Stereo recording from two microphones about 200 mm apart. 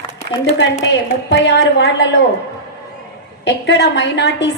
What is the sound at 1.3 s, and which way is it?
Speech, 55° left (ahead or behind).